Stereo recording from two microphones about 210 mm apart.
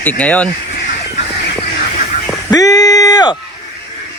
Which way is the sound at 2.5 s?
15° left (ahead or behind).